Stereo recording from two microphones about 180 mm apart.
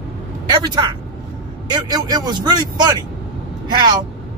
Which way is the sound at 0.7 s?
25° right (ahead or behind).